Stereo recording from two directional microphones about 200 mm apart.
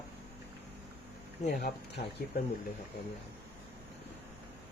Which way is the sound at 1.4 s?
55° left (ahead or behind).